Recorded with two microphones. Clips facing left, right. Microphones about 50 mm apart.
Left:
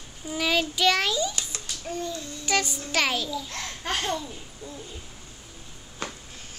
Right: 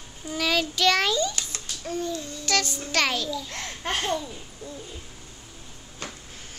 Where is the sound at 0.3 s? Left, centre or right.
Centre.